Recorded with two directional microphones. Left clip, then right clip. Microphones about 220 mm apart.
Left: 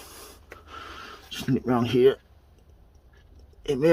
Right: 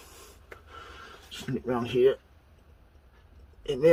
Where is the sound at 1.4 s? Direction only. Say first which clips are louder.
Left 5 dB; 45° left (ahead or behind).